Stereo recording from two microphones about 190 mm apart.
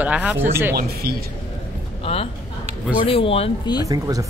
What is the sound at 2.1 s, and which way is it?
Speech, 30° left (ahead or behind).